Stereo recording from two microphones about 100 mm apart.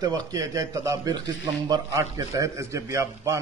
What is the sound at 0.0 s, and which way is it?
A man's voice, 40° right (ahead or behind).